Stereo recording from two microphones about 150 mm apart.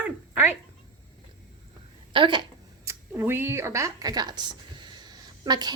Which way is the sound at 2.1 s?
30° right (ahead or behind).